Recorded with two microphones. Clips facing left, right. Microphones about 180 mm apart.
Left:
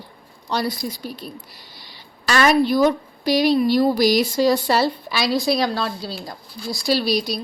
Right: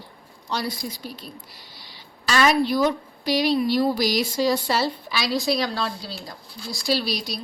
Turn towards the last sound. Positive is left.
turn(degrees=45)  # may be behind; listen again after turning